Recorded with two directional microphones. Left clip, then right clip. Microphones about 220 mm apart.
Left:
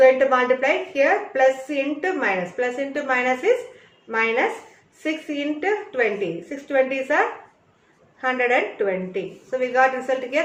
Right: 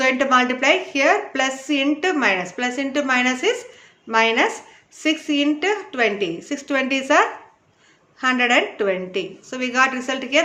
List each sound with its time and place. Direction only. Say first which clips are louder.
0.0 s a woman's voice: left 2 dB; 50° right (ahead or behind)